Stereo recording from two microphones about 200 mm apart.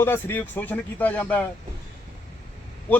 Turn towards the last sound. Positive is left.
turn(degrees=10)  # may be behind; listen again after turning